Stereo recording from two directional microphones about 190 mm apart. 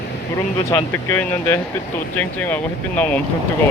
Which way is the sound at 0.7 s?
15° left (ahead or behind).